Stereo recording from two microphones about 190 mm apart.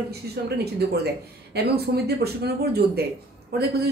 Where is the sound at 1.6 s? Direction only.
60° right (ahead or behind).